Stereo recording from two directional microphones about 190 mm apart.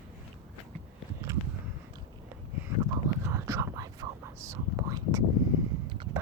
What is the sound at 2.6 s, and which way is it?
Whispering, 15° right (ahead or behind).